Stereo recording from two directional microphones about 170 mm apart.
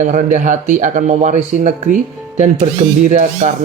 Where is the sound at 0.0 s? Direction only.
50° right (ahead or behind).